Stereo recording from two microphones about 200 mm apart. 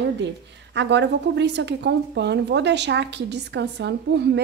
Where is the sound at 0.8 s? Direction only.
60° right (ahead or behind).